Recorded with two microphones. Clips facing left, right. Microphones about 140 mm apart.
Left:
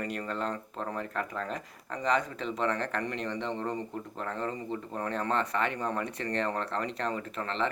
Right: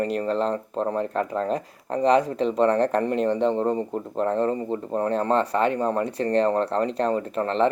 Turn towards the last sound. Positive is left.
turn(degrees=-40)  # may be behind; listen again after turning